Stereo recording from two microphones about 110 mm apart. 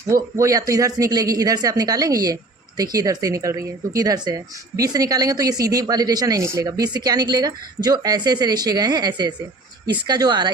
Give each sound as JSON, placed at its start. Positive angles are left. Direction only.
{"t": 0.1, "sound": "speech", "side_deg": -30}